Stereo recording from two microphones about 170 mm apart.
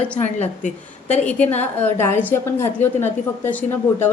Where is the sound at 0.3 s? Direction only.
40° left (ahead or behind).